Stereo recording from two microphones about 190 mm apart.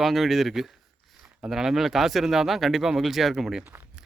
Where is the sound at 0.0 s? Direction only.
Centre (ahead or behind).